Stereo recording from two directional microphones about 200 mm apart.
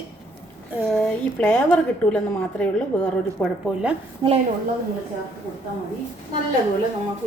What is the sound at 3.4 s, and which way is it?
Speech, 5° left (ahead or behind).